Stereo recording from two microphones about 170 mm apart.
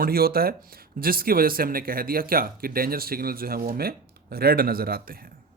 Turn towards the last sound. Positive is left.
turn(degrees=-60)  # may be behind; listen again after turning